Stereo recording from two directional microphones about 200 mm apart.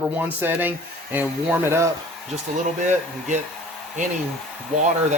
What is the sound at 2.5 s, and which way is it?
Speech, 35° right (ahead or behind).